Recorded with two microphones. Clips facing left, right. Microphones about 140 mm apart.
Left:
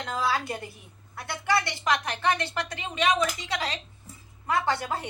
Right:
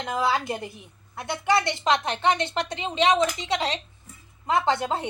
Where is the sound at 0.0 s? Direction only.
20° right (ahead or behind).